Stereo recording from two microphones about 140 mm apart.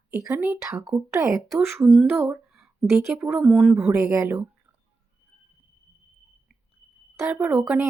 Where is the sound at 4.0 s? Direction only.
20° right (ahead or behind).